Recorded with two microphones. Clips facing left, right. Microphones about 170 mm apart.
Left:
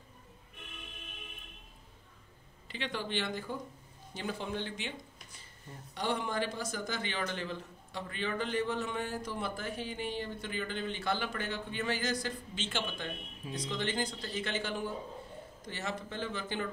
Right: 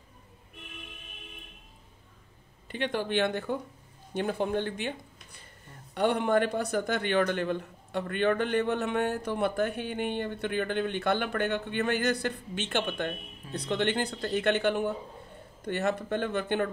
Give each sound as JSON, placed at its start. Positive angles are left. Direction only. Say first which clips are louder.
{"t": 2.7, "sound": "a man's voice", "louder": "right 7 dB", "side_deg": -55}